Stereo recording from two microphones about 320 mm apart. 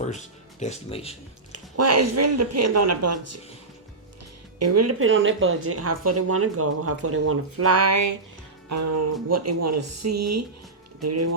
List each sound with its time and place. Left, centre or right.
0.6 s speech: centre
1.5 s speech: right
4.6 s speech: right
8.7 s music: right
9.3 s speech: right